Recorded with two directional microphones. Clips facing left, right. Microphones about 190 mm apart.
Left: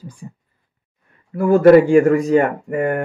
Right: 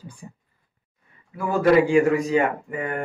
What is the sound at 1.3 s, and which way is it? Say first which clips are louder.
Speech: left 8 dB; 55° left (ahead or behind).